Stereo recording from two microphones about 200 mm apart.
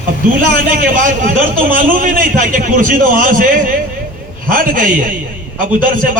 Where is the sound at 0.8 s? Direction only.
45° right (ahead or behind).